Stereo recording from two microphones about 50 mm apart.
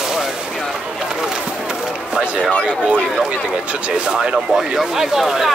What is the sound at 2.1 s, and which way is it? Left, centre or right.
Speech, centre.